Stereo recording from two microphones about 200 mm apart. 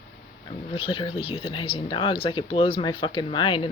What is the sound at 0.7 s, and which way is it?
Speech, 25° left (ahead or behind).